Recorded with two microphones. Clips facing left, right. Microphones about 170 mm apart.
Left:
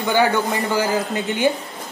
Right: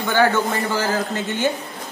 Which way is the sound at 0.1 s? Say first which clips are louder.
Even; 15° left (ahead or behind).